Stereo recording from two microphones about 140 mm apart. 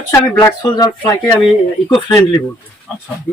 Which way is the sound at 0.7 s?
30° left (ahead or behind).